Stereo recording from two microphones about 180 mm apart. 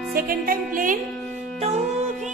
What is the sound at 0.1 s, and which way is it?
Music, 55° right (ahead or behind).